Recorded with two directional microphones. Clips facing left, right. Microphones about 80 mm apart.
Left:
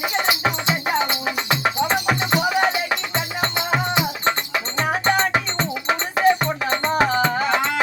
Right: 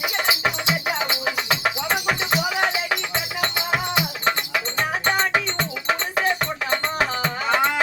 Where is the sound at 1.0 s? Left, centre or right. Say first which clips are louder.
Left 1 dB; left.